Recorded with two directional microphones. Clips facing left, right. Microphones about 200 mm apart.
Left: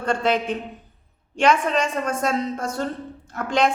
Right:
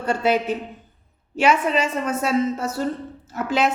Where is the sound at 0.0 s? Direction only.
10° right (ahead or behind).